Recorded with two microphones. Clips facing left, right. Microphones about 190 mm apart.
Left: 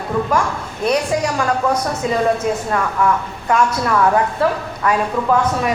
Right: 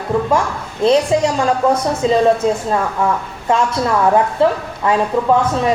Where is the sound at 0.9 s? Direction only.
25° right (ahead or behind).